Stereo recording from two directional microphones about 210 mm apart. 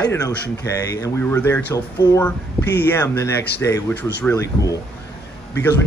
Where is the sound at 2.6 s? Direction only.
50° left (ahead or behind).